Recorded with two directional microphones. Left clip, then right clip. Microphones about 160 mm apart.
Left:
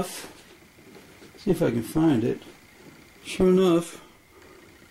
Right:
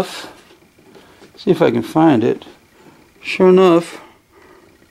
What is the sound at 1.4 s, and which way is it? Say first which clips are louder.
Speech: right 11 dB; 30° right (ahead or behind).